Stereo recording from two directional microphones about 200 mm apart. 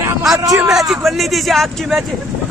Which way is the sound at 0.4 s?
15° right (ahead or behind).